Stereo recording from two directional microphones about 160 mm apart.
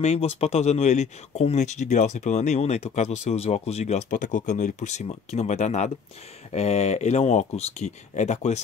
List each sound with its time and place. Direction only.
0.0 s speech: 40° left (ahead or behind)